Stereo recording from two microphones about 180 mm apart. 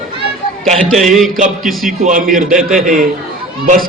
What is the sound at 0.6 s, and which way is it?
Speech, centre (ahead or behind).